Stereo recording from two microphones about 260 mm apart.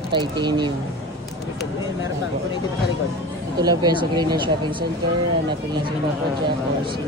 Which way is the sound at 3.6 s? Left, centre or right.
Centre.